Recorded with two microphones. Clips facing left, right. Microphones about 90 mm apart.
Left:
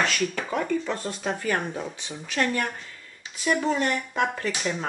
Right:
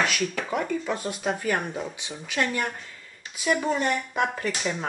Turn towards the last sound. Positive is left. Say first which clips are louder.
# even
turn(degrees=0)  # may be behind; listen again after turning